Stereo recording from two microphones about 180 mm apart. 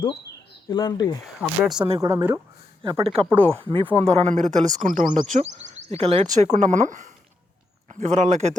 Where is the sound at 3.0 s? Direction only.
35° right (ahead or behind).